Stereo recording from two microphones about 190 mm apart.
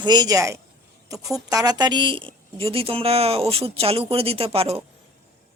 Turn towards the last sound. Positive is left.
turn(degrees=-30)  # may be behind; listen again after turning